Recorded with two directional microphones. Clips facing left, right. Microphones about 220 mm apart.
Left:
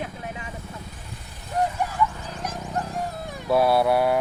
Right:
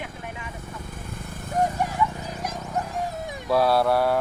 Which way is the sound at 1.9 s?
15° right (ahead or behind).